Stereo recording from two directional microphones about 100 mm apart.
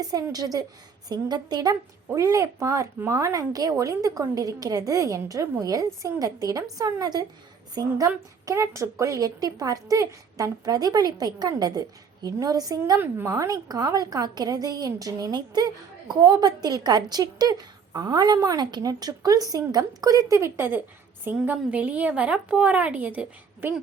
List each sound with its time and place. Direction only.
0.0 s a woman's voice: 40° right (ahead or behind)
2.1 s a woman's voice: 35° right (ahead or behind)
13.0 s a woman's voice: 25° right (ahead or behind)